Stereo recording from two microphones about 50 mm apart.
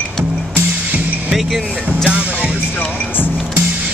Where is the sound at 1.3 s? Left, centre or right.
Centre.